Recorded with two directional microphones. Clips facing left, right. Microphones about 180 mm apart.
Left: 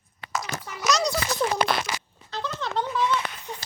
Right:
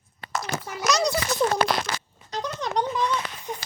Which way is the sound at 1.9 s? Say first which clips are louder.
Right 1 dB; 10° left (ahead or behind).